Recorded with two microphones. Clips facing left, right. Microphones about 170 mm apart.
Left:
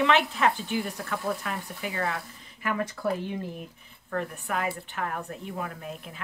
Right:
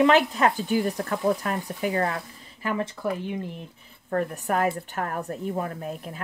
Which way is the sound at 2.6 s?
25° right (ahead or behind).